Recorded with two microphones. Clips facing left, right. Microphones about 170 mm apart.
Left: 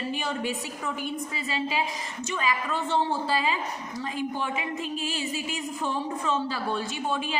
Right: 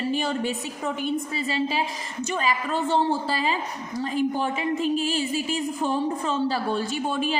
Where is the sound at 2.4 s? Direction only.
35° right (ahead or behind).